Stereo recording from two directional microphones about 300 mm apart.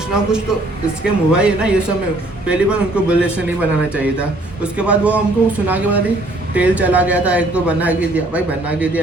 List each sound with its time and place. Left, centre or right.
0.1 s a man's voice: centre